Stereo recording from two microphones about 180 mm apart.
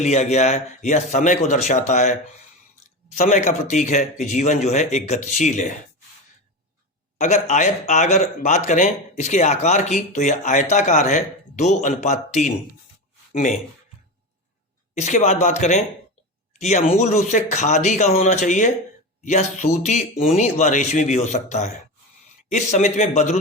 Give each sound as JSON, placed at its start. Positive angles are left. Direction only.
{"t": 0.0, "sound": "speech", "side_deg": 40}
{"t": 3.2, "sound": "speech", "side_deg": 45}
{"t": 7.2, "sound": "speech", "side_deg": 40}
{"t": 14.9, "sound": "speech", "side_deg": 40}